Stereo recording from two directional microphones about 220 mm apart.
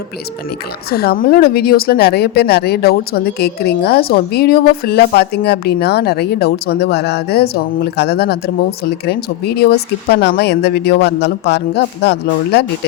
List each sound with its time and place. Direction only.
0.9 s speech: 45° left (ahead or behind)